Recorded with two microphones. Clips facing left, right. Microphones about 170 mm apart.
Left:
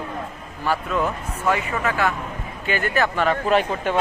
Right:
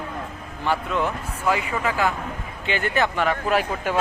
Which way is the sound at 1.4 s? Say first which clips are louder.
Left 1 dB; 15° right (ahead or behind).